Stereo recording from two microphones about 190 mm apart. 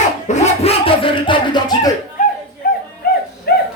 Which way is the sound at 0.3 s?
35° left (ahead or behind).